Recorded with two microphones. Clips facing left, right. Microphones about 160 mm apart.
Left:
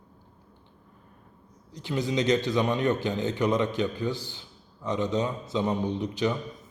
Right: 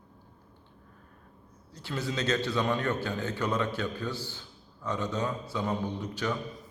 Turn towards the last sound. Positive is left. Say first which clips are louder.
# left 5 dB
turn(degrees=20)  # may be behind; listen again after turning